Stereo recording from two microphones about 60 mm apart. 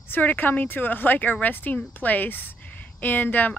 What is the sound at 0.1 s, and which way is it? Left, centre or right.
Speech, left.